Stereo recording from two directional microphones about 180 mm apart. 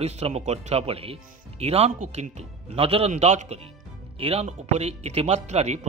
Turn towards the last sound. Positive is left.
turn(degrees=-40)  # may be behind; listen again after turning